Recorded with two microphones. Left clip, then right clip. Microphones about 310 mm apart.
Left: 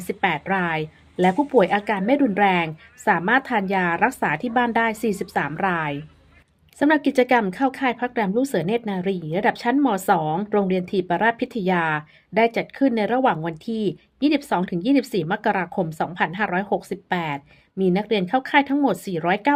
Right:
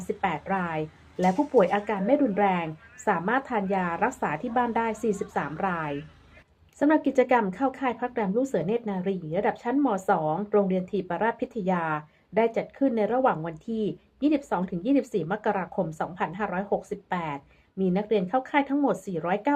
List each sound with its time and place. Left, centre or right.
0.1 s a woman's voice: left